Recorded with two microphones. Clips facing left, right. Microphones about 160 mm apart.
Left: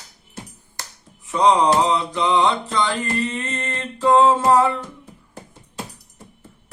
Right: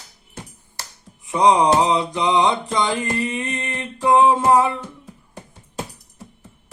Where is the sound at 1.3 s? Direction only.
15° right (ahead or behind).